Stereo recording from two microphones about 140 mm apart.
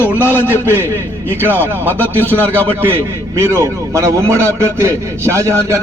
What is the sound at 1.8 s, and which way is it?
Speech, 15° left (ahead or behind).